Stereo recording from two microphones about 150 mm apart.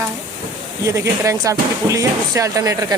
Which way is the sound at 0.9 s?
20° right (ahead or behind).